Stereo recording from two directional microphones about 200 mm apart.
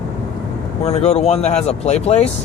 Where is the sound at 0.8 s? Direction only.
30° left (ahead or behind).